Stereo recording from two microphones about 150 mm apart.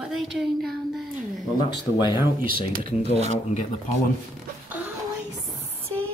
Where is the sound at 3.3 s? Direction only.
40° left (ahead or behind).